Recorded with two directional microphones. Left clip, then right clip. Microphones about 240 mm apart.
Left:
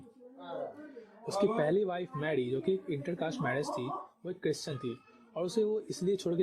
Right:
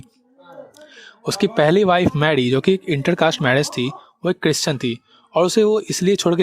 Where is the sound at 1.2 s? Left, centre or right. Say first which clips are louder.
Right 13 dB; right.